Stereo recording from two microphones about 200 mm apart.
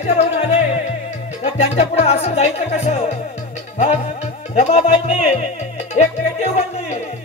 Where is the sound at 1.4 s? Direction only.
35° left (ahead or behind).